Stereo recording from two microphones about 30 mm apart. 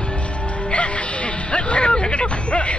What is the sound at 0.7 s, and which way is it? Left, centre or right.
Music, left.